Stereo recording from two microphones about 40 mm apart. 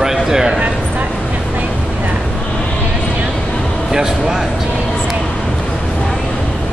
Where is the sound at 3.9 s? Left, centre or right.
Centre.